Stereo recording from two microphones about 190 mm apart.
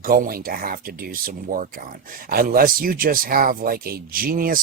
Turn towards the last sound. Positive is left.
turn(degrees=-50)  # may be behind; listen again after turning